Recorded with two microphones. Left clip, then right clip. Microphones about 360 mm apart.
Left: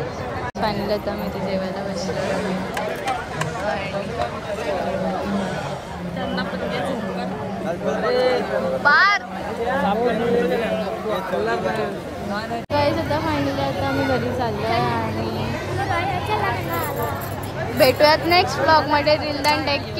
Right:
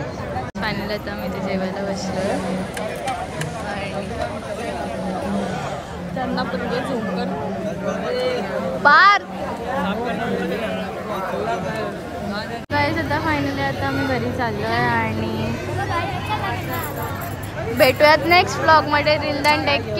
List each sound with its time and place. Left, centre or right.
0.6 s speech: centre
8.8 s speech: centre
9.8 s speech: left
12.7 s speech: centre
17.7 s speech: centre